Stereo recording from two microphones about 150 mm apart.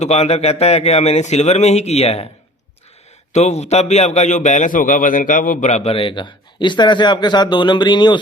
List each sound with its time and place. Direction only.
0.0 s a man's voice: 45° left (ahead or behind)
3.3 s a man's voice: 45° left (ahead or behind); by 8.2 s 30° left (ahead or behind)